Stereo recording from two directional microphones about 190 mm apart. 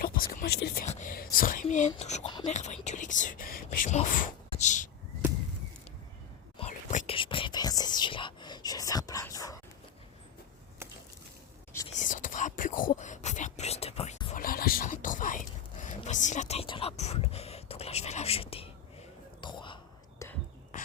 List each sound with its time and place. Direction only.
0.0 s speech: 50° left (ahead or behind)
0.9 s speech: 40° left (ahead or behind)
6.6 s whispering: 35° left (ahead or behind); by 9.6 s 20° left (ahead or behind)
11.9 s whispering: 40° left (ahead or behind)
14.3 s whispering: 50° left (ahead or behind); by 20.2 s 25° left (ahead or behind)